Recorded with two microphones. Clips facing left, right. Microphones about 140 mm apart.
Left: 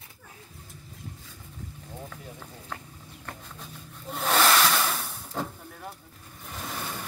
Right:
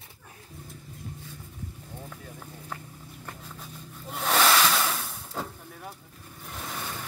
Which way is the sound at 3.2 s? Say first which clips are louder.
Left 1 dB; centre (ahead or behind).